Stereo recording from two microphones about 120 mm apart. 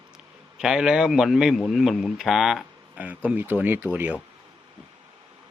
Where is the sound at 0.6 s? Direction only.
5° right (ahead or behind).